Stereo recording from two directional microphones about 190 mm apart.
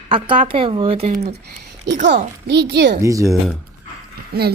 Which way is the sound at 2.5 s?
60° right (ahead or behind).